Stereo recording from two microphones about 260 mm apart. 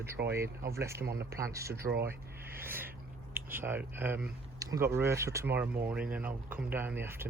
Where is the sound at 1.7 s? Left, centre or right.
Right.